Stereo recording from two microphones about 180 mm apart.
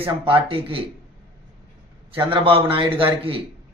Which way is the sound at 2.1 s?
30° right (ahead or behind).